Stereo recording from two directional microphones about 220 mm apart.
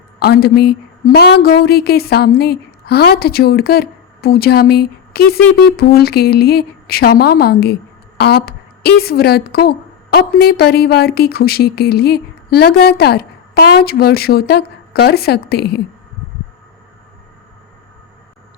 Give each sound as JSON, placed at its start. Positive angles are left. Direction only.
{"t": 0.2, "sound": "a woman's voice", "side_deg": 45}